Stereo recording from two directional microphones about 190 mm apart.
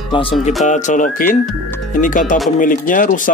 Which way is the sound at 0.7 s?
40° left (ahead or behind).